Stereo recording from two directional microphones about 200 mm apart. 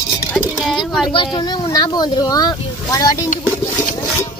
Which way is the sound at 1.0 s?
25° left (ahead or behind).